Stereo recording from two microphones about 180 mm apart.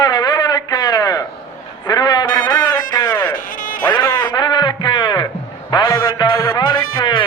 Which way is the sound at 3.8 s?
25° left (ahead or behind).